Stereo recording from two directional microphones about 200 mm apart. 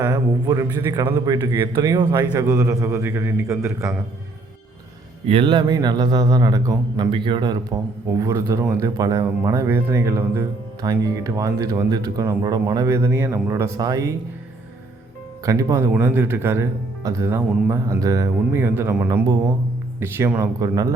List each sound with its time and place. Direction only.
0.0 s speech: 15° right (ahead or behind)
5.2 s speech: 25° right (ahead or behind)
15.4 s speech: 15° right (ahead or behind)